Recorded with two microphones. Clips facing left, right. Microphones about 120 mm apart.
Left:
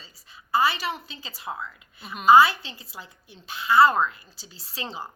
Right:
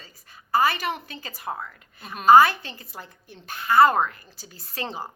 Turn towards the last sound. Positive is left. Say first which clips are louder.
# right 3 dB
turn(degrees=-45)  # may be behind; listen again after turning